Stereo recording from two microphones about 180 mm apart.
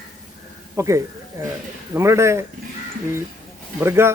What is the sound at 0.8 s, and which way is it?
Speech, 15° right (ahead or behind).